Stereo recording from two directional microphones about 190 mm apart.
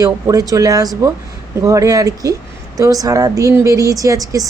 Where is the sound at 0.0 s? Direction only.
20° right (ahead or behind).